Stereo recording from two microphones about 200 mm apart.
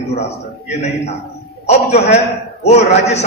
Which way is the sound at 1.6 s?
30° left (ahead or behind).